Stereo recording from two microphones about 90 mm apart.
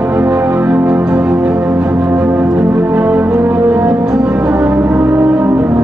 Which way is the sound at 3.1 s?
30° right (ahead or behind).